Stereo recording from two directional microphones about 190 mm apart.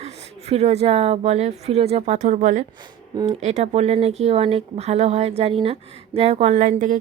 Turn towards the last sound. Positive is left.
turn(degrees=-40)  # may be behind; listen again after turning